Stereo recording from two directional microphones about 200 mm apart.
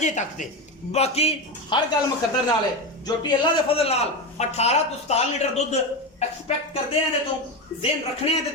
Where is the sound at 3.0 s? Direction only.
25° left (ahead or behind).